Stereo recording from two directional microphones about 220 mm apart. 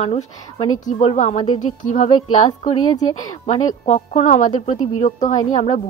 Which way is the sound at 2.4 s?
20° left (ahead or behind).